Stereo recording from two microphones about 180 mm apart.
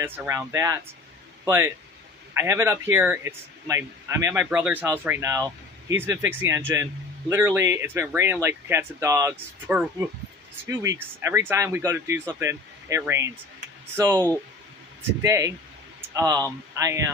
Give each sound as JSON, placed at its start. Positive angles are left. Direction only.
{"t": 0.0, "sound": "a man's voice", "side_deg": -10}
{"t": 15.2, "sound": "speech", "side_deg": -20}